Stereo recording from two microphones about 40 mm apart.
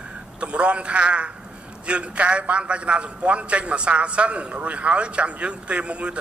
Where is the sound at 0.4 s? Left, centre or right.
Right.